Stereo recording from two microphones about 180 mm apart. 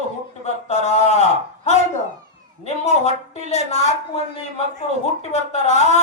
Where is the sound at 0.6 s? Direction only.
40° left (ahead or behind).